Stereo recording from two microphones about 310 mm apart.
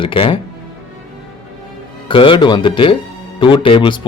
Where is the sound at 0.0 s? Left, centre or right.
Centre.